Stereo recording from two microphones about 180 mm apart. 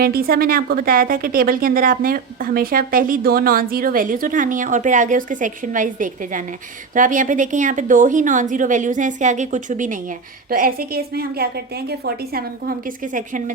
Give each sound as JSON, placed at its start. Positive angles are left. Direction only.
{"t": 0.0, "sound": "a woman's voice", "side_deg": -55}